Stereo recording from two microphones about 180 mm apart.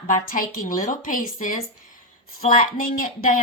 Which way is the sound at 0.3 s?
50° left (ahead or behind).